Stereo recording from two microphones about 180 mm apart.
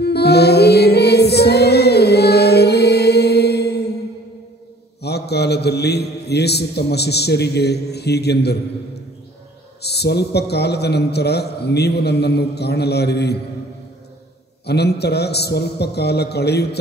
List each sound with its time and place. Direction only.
0.0 s music: 65° left (ahead or behind)
5.0 s mantra: 65° left (ahead or behind)
9.8 s a man's voice: 65° left (ahead or behind)
14.7 s a man's voice: 65° left (ahead or behind)